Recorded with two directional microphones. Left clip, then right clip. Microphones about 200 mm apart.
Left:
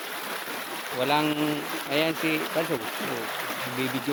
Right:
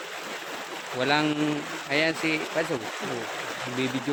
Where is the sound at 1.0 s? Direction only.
20° right (ahead or behind).